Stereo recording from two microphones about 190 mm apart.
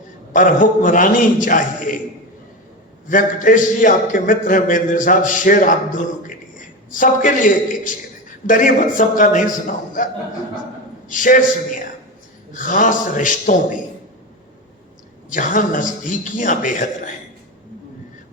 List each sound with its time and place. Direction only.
0.3 s a man's voice: 45° left (ahead or behind)
3.1 s a man's voice: 45° left (ahead or behind)
11.1 s a man's voice: 45° left (ahead or behind)
15.3 s a man's voice: 45° left (ahead or behind)